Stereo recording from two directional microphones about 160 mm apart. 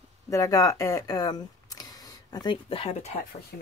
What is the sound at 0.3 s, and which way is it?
Speech, 20° left (ahead or behind).